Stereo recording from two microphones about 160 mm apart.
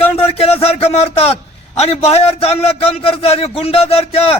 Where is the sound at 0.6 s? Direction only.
40° left (ahead or behind).